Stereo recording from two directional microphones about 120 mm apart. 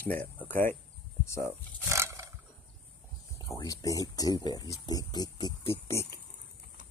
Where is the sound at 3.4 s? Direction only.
30° left (ahead or behind).